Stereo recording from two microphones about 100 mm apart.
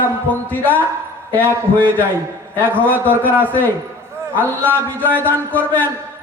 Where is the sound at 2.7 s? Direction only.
20° left (ahead or behind).